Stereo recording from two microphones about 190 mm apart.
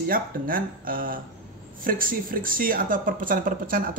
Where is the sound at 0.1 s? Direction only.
50° right (ahead or behind).